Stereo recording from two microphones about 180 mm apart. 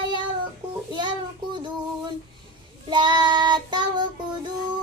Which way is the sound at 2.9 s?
25° right (ahead or behind).